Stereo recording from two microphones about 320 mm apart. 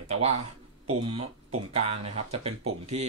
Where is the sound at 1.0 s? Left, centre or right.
Centre.